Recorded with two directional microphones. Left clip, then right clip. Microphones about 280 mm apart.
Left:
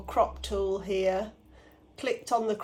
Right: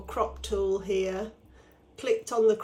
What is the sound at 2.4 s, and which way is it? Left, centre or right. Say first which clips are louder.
Speech: right 8 dB; centre.